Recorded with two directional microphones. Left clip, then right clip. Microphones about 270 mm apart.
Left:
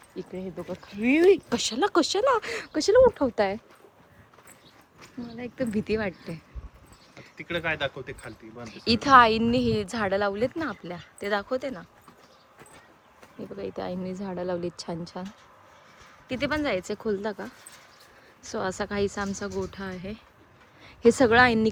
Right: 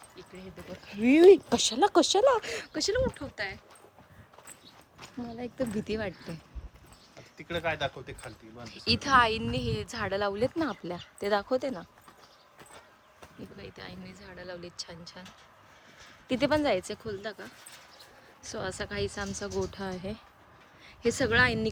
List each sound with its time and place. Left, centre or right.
0.2 s a woman's voice: centre
1.0 s a woman's voice: centre
4.9 s a woman's voice: centre
8.6 s a woman's voice: centre
13.6 s speech: centre
16.3 s a woman's voice: centre
20.8 s speech: centre